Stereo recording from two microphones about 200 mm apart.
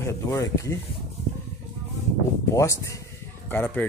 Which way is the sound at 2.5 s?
15° left (ahead or behind).